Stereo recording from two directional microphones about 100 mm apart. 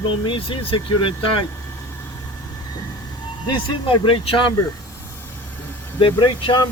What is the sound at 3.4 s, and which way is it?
Speech, 50° left (ahead or behind).